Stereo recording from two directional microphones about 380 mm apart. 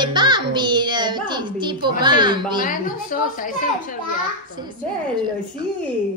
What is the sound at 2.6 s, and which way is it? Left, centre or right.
A woman's voice, left.